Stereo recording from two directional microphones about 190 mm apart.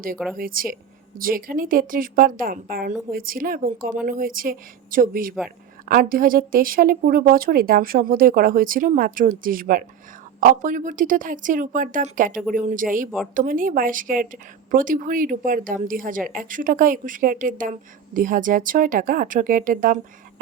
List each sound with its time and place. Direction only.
0.3 s speech: 50° right (ahead or behind)